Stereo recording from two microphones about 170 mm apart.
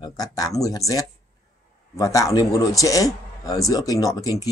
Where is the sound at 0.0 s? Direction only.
20° left (ahead or behind).